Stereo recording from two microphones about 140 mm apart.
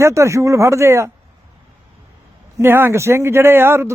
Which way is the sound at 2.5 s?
15° right (ahead or behind).